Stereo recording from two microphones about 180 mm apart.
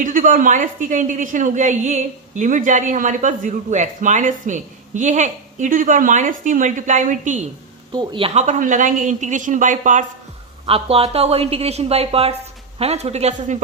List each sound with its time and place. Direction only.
0.0 s a woman's voice: 50° right (ahead or behind)
7.9 s a woman's voice: 30° right (ahead or behind); by 10.0 s 45° right (ahead or behind)
10.7 s a woman's voice: 30° right (ahead or behind)